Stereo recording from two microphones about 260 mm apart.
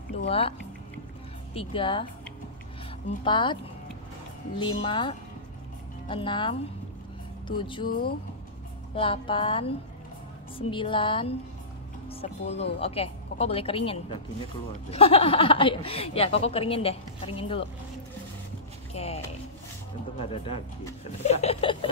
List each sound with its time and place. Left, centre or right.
0.3 s speech: left
3.3 s speech: centre
4.6 s speech: centre
7.9 s speech: left
8.9 s speech: centre
18.9 s a sound: left
20.2 s speech: left